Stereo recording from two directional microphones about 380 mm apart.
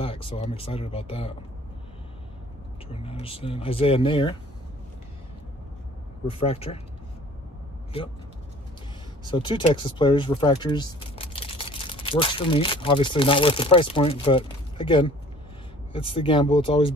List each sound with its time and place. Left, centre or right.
0.0 s speech: centre
2.9 s speech: centre
6.2 s speech: centre
9.2 s speech: centre